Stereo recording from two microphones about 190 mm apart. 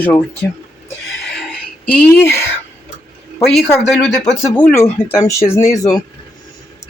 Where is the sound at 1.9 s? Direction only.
10° left (ahead or behind).